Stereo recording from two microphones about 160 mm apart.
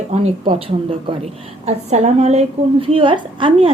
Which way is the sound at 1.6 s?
45° right (ahead or behind).